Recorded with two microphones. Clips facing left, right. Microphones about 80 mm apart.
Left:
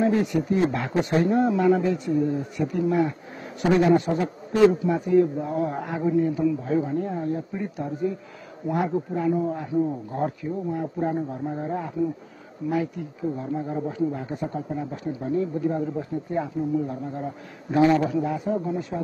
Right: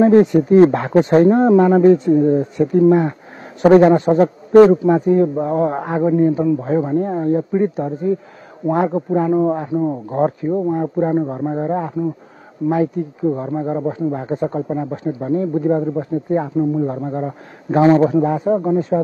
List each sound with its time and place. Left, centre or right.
0.0 s a man's voice: right